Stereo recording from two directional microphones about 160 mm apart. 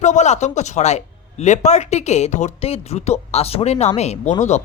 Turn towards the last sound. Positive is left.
turn(degrees=40)  # may be behind; listen again after turning